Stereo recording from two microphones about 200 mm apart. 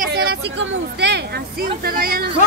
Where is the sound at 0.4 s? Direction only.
60° right (ahead or behind).